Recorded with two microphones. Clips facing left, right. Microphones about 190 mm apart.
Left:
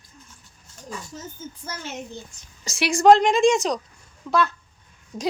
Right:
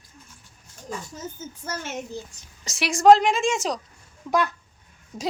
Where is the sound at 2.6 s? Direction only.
Centre (ahead or behind).